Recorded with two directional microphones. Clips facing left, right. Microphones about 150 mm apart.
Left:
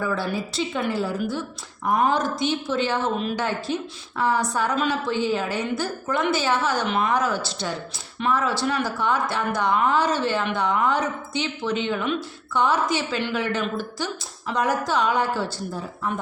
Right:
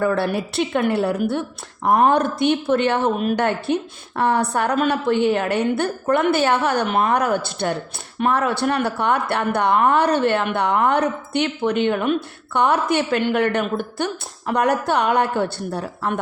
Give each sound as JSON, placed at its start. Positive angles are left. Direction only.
{"t": 0.0, "sound": "speech", "side_deg": -65}